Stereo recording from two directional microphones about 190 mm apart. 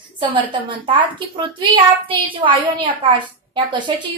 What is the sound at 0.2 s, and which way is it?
A woman's voice, 25° right (ahead or behind).